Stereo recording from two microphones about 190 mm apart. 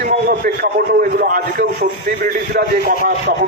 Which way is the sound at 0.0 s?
45° right (ahead or behind).